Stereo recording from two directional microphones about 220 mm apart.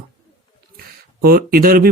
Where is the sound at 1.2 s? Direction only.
40° right (ahead or behind).